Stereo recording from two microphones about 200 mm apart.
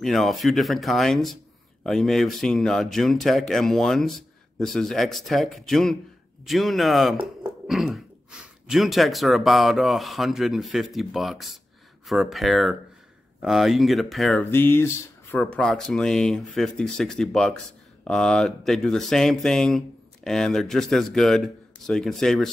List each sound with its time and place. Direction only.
0.0 s speech: centre (ahead or behind)